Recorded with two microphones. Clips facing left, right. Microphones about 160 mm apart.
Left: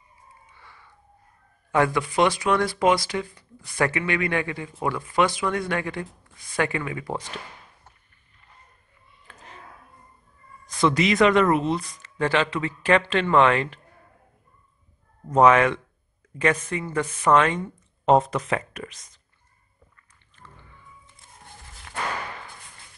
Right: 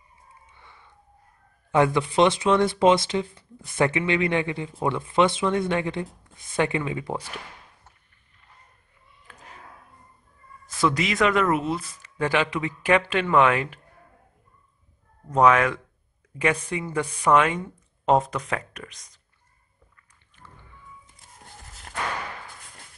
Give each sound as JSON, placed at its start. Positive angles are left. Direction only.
{"t": 0.6, "sound": "a sound", "side_deg": -20}
{"t": 1.7, "sound": "speech", "side_deg": -20}
{"t": 10.7, "sound": "speech", "side_deg": 0}
{"t": 15.3, "sound": "speech", "side_deg": 0}
{"t": 16.3, "sound": "speech", "side_deg": -10}